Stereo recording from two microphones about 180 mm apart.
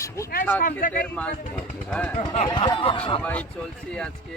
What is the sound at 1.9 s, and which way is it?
Speech, 5° left (ahead or behind).